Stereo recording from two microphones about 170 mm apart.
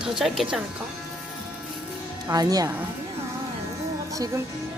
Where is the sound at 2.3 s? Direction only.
20° right (ahead or behind).